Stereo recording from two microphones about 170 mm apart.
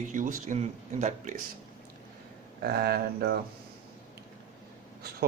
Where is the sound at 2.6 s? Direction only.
65° right (ahead or behind).